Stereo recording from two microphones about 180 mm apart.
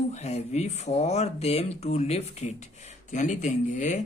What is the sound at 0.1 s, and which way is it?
A man's voice, 35° left (ahead or behind).